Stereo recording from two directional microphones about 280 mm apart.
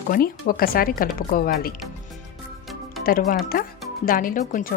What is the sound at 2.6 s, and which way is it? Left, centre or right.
Music, centre.